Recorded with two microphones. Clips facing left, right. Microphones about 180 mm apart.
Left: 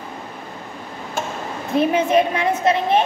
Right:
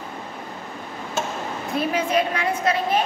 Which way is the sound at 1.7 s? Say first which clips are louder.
Left 6 dB; 25° left (ahead or behind).